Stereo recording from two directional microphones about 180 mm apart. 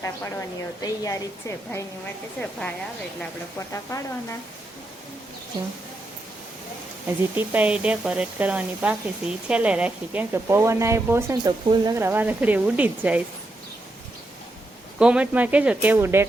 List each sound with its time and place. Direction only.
0.0 s a woman's voice: 15° left (ahead or behind)
2.4 s speech: 5° left (ahead or behind)
3.7 s a woman's voice: 15° left (ahead or behind)
7.3 s speech: 10° right (ahead or behind)
14.9 s speech: 5° right (ahead or behind)